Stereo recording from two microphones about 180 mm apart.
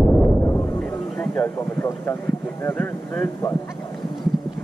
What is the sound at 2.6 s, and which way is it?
Speech, 10° left (ahead or behind).